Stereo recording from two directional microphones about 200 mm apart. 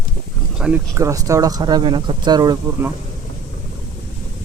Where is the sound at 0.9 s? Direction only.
15° right (ahead or behind).